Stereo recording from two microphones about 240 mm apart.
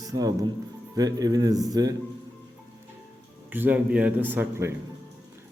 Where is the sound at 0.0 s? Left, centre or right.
Centre.